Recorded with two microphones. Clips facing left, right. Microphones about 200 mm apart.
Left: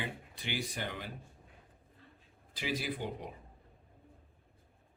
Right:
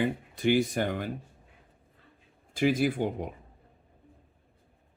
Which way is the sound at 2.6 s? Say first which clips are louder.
Right 12 dB; 50° right (ahead or behind).